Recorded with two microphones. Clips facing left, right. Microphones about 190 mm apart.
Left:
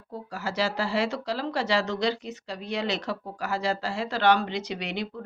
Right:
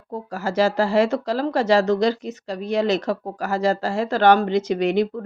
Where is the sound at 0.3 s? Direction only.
45° right (ahead or behind).